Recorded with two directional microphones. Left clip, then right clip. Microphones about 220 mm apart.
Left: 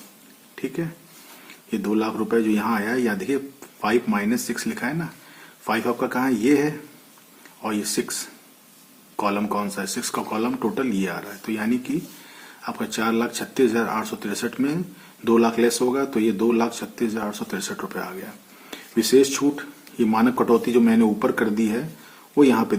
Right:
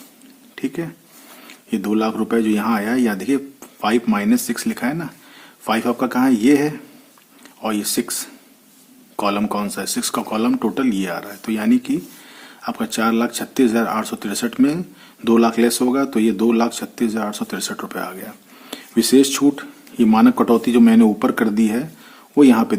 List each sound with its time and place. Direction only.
0.5 s speech: 40° right (ahead or behind)